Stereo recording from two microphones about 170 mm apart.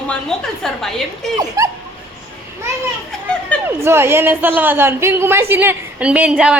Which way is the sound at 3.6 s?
15° right (ahead or behind).